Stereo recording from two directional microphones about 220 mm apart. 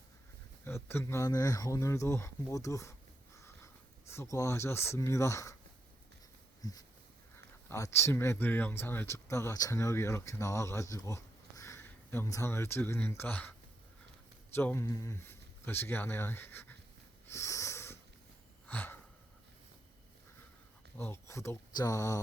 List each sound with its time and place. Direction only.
0.6 s speech: 10° left (ahead or behind)
4.0 s speech: 10° left (ahead or behind)
6.6 s a sound: 15° left (ahead or behind)
7.7 s speech: 10° left (ahead or behind)
14.5 s speech: 10° left (ahead or behind)
17.2 s sniff: 15° left (ahead or behind)
18.7 s gasp: 10° left (ahead or behind)
21.0 s speech: 10° left (ahead or behind)